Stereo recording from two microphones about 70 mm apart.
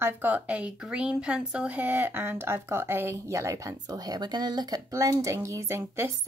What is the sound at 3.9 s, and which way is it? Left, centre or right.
Speech, right.